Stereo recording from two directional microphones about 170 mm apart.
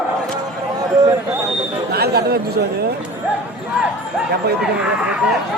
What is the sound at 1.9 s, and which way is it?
Speech, 70° right (ahead or behind).